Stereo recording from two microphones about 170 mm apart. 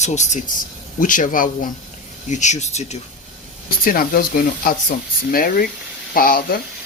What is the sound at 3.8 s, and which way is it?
Speech, 55° left (ahead or behind).